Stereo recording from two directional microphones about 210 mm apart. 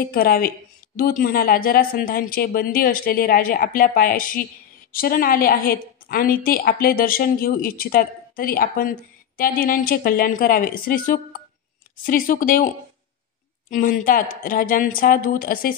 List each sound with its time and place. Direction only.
0.0 s a woman's voice: 45° left (ahead or behind)
13.7 s a woman's voice: 40° left (ahead or behind)